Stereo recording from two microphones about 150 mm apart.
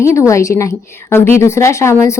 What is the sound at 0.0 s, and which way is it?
A woman's voice, 20° left (ahead or behind).